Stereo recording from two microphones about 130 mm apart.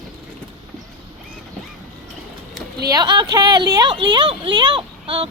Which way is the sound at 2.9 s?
35° right (ahead or behind).